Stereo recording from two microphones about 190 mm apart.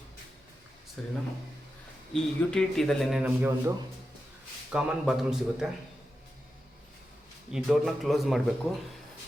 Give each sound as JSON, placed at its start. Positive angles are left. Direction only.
{"t": 1.0, "sound": "speech", "side_deg": 5}
{"t": 2.1, "sound": "speech", "side_deg": 5}
{"t": 7.5, "sound": "speech", "side_deg": 0}